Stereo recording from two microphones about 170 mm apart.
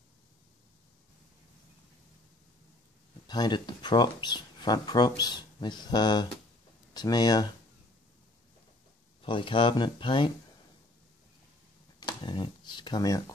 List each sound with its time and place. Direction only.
3.3 s speech: 25° left (ahead or behind)
9.2 s speech: 30° left (ahead or behind)
12.0 s speech: 25° left (ahead or behind)